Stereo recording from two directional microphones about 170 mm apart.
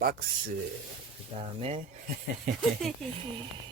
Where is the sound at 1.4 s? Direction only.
35° right (ahead or behind).